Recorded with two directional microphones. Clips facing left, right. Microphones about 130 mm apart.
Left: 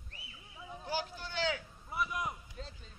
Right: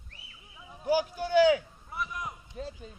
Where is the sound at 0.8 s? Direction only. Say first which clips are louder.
Right 11 dB; 15° right (ahead or behind).